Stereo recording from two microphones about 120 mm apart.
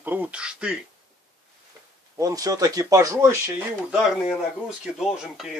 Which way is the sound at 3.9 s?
5° right (ahead or behind).